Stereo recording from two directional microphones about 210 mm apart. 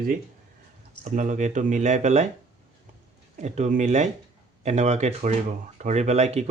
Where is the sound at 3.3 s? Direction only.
35° right (ahead or behind).